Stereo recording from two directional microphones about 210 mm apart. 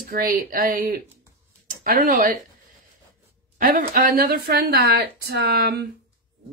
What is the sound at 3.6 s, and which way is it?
A woman's voice, 40° right (ahead or behind).